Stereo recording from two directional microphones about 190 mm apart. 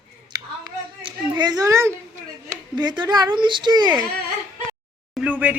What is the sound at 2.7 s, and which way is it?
A woman's voice, 20° right (ahead or behind).